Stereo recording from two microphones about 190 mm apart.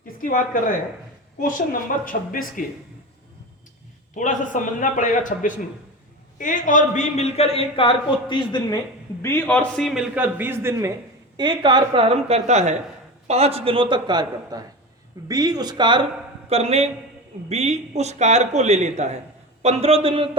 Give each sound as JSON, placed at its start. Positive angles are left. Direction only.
{"t": 0.0, "sound": "a man's voice", "side_deg": 45}
{"t": 4.1, "sound": "a man's voice", "side_deg": 40}
{"t": 9.2, "sound": "a man's voice", "side_deg": 10}